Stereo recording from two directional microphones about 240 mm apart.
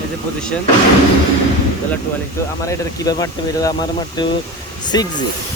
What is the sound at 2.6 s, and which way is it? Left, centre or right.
Speech, centre.